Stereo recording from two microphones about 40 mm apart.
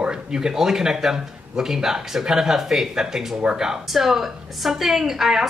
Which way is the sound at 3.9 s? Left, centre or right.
Centre.